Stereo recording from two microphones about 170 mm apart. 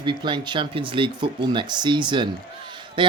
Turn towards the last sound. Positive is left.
turn(degrees=-30)  # may be behind; listen again after turning